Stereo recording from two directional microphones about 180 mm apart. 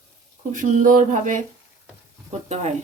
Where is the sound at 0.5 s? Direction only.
45° right (ahead or behind).